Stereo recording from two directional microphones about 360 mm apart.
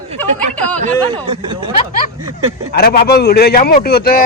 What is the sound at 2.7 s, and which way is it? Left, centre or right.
A man's voice, left.